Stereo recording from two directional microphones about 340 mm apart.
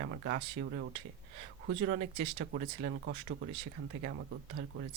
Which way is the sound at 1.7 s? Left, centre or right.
Right.